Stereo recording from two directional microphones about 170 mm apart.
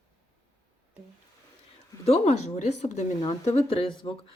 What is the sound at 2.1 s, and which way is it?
Speech, 40° left (ahead or behind).